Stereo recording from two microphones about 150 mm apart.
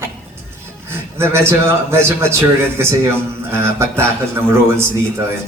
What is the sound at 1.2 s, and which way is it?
A man's voice, 15° right (ahead or behind).